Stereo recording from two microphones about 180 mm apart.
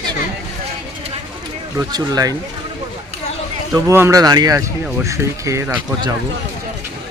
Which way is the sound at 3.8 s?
15° right (ahead or behind).